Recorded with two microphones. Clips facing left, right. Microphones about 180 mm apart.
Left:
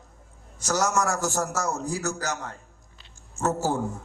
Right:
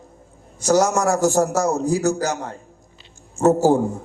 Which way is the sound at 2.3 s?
30° right (ahead or behind).